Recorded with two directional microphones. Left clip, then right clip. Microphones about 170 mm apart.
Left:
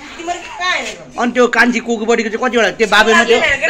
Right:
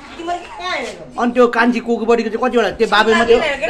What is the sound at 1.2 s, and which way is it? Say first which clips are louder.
A man's voice: left 2 dB; 10° left (ahead or behind).